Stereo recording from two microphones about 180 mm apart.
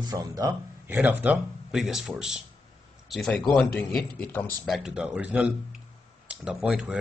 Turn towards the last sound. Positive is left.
turn(degrees=-5)  # may be behind; listen again after turning